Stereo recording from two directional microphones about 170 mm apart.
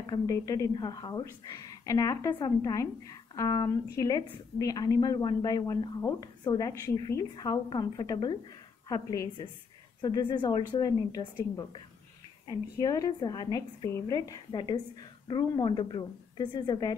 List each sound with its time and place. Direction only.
0.0 s a woman's voice: 20° left (ahead or behind)
12.4 s a woman's voice: 20° left (ahead or behind)